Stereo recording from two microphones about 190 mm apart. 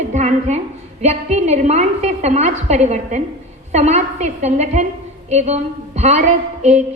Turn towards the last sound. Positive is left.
turn(degrees=-40)  # may be behind; listen again after turning